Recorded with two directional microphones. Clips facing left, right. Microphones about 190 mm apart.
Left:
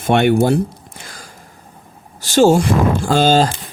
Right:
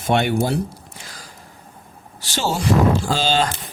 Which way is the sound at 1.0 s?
50° left (ahead or behind).